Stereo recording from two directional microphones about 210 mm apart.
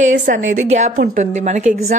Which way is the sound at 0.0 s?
35° right (ahead or behind).